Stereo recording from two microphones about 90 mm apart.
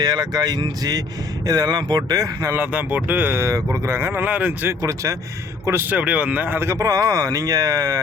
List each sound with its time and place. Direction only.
0.0 s speech: 50° right (ahead or behind)
2.6 s speech: 15° right (ahead or behind)
3.3 s speech: 30° right (ahead or behind); by 4.7 s 15° right (ahead or behind)
4.8 s speech: 35° right (ahead or behind)
5.9 s speech: 15° right (ahead or behind); by 8.0 s 40° right (ahead or behind)